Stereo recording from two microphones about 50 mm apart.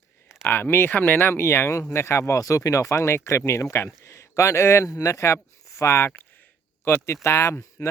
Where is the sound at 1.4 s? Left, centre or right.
Left.